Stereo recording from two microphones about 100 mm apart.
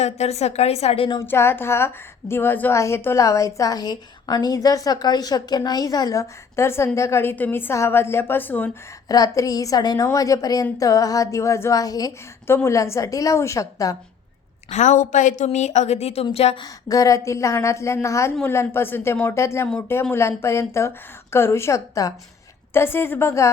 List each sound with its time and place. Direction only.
0.0 s a woman's voice: 90° left; by 1.2 s 65° left (ahead or behind)
1.3 s a woman's voice: 20° left (ahead or behind)
9.0 s speech: 40° left (ahead or behind)
12.5 s speech: 25° left (ahead or behind)
15.4 s a woman's voice: 90° left
16.6 s a woman's voice: 40° left (ahead or behind)